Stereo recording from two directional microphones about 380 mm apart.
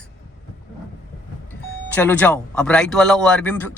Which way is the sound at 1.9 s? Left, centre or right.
Centre.